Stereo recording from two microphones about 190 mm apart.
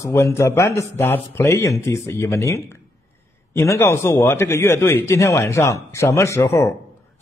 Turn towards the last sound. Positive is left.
turn(degrees=15)  # may be behind; listen again after turning